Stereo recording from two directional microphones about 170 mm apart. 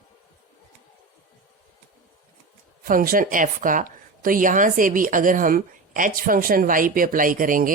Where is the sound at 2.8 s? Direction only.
55° right (ahead or behind).